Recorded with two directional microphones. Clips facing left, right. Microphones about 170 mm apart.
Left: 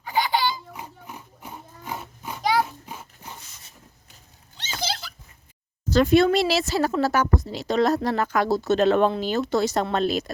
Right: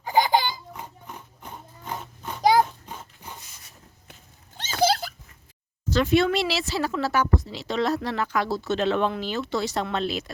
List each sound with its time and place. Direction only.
0.0 s laughter: 45° right (ahead or behind)
0.7 s oink: 10° left (ahead or behind)
2.4 s a sound: 40° right (ahead or behind)
2.8 s dog: 10° left (ahead or behind)
4.8 s a sound: 50° right (ahead or behind)
5.9 s speech: 40° left (ahead or behind)